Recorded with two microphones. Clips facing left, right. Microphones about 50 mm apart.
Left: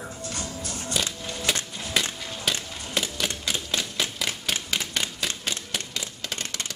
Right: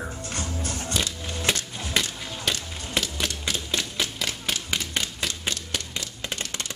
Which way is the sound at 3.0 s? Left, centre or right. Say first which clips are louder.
Right 1 dB; centre.